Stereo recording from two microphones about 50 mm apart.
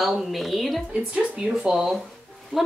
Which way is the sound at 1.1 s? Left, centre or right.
Right.